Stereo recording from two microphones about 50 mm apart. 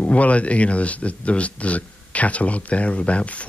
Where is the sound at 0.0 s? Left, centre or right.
Left.